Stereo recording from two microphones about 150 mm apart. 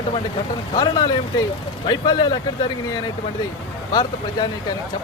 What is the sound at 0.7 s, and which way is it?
Speech, 25° left (ahead or behind).